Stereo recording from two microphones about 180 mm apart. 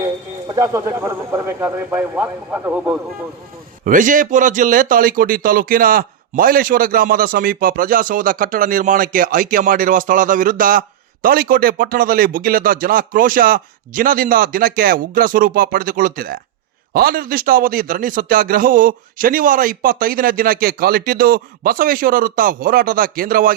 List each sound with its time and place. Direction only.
0.0 s speech: 20° right (ahead or behind)
3.8 s speech: 45° right (ahead or behind)